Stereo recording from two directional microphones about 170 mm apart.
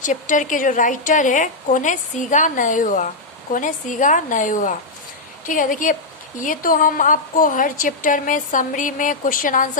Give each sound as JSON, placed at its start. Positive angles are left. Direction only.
{"t": 0.0, "sound": "a woman's voice", "side_deg": 50}